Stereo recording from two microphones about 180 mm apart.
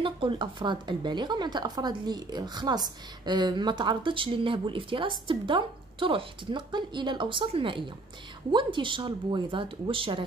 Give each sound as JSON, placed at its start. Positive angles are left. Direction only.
{"t": 0.0, "sound": "speech", "side_deg": -30}